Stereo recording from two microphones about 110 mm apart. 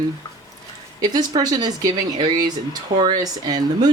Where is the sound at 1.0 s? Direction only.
35° right (ahead or behind).